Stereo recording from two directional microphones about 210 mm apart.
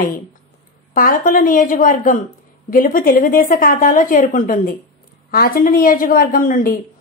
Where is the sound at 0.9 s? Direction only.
40° left (ahead or behind).